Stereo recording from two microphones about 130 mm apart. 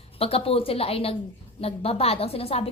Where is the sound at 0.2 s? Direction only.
50° left (ahead or behind).